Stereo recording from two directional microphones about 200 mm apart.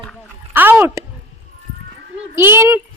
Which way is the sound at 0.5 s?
10° right (ahead or behind).